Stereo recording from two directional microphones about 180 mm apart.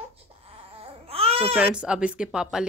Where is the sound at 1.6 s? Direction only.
5° right (ahead or behind).